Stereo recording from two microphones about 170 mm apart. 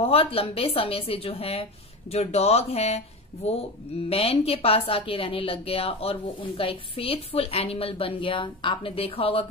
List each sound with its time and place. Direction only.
0.0 s a woman's voice: 35° left (ahead or behind)
4.1 s a woman's voice: 35° left (ahead or behind)